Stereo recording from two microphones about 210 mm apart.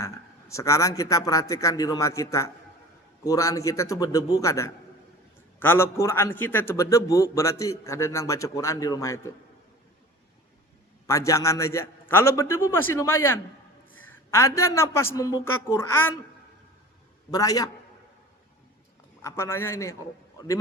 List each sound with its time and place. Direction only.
0.0 s a man's voice: 15° left (ahead or behind)
11.0 s a man's voice: 15° left (ahead or behind)
17.3 s a man's voice: 15° left (ahead or behind)
19.2 s a man's voice: 10° left (ahead or behind)